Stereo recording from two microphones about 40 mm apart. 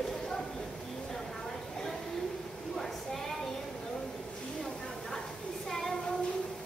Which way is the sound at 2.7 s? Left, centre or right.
Centre.